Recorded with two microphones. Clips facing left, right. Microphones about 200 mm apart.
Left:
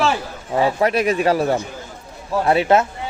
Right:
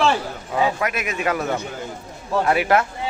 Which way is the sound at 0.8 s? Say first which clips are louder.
Left 7 dB; 30° left (ahead or behind).